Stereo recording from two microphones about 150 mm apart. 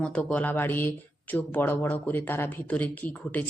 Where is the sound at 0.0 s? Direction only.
10° left (ahead or behind).